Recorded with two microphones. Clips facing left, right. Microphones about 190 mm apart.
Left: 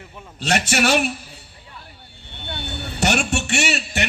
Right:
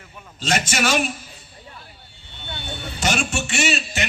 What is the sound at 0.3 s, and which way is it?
Speech, 65° left (ahead or behind).